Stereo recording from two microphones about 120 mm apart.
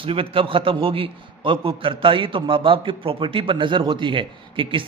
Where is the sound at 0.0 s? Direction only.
50° right (ahead or behind).